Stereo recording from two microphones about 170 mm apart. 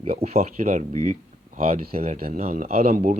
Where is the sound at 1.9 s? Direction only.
35° right (ahead or behind).